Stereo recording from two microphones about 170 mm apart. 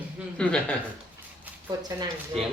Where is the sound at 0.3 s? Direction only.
5° left (ahead or behind).